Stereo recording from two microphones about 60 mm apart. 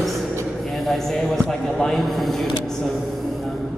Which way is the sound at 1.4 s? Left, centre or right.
Centre.